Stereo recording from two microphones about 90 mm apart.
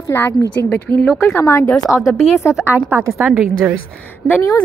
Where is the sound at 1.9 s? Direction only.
Centre (ahead or behind).